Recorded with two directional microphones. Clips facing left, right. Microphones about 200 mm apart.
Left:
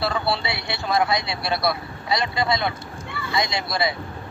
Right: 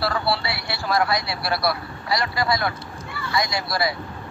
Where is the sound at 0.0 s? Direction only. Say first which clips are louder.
Even; 20° left (ahead or behind).